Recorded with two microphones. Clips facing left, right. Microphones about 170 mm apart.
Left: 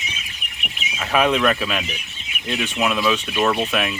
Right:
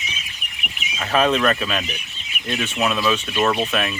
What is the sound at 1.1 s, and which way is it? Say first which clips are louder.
Speech: even; 10° left (ahead or behind).